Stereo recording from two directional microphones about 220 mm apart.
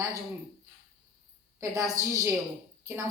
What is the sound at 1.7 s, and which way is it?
Speech, 15° right (ahead or behind).